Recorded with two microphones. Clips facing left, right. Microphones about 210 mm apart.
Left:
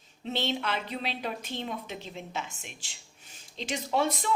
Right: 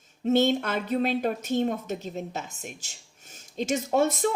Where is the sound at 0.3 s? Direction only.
45° right (ahead or behind).